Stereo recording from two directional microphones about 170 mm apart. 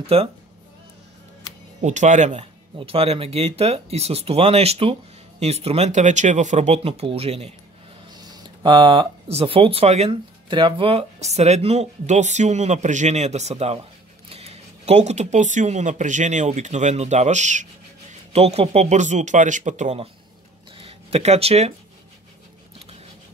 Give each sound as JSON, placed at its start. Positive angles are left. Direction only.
{"t": 0.0, "sound": "speech", "side_deg": -35}
{"t": 1.8, "sound": "speech", "side_deg": -45}
{"t": 8.1, "sound": "speech", "side_deg": -25}